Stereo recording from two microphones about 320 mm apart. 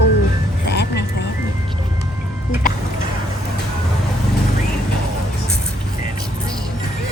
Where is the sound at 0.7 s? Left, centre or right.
Left.